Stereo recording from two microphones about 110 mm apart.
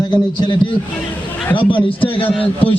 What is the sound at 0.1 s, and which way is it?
A man's voice, 45° left (ahead or behind).